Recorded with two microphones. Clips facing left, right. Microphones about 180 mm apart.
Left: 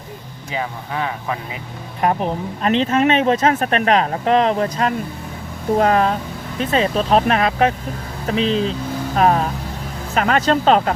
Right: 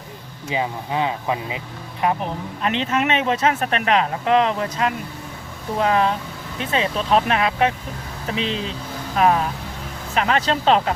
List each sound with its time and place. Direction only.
0.5 s speech: 20° right (ahead or behind)
2.0 s speech: 45° left (ahead or behind)